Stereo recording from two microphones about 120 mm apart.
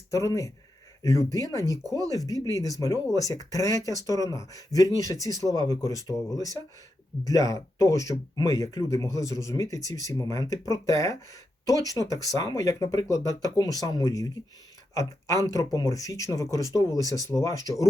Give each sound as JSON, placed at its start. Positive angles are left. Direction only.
{"t": 0.1, "sound": "speech", "side_deg": 25}